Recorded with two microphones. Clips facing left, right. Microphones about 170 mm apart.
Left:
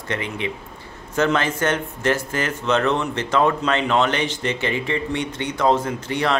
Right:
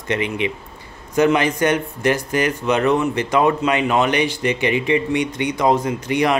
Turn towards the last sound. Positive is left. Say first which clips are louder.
# right 4 dB
turn(degrees=-15)  # may be behind; listen again after turning